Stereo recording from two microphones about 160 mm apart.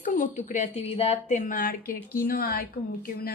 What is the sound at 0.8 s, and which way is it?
A woman's voice, 40° left (ahead or behind).